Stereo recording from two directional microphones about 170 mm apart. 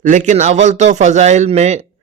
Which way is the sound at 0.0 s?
45° right (ahead or behind).